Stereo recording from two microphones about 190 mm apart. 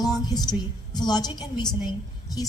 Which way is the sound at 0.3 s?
20° left (ahead or behind).